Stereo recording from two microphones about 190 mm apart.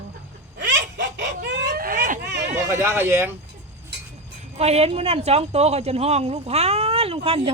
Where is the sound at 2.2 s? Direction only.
65° right (ahead or behind).